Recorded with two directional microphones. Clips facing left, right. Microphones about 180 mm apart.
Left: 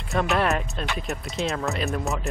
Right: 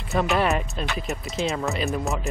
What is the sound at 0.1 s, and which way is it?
Speech, centre (ahead or behind).